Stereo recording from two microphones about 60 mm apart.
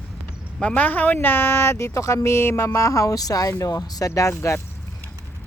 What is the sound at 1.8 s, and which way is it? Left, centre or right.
Speech, left.